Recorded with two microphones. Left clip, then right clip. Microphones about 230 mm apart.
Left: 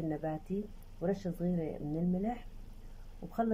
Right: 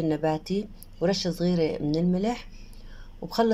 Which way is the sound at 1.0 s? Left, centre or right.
Centre.